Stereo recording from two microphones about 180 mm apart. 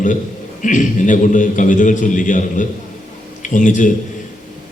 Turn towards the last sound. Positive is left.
turn(degrees=45)  # may be behind; listen again after turning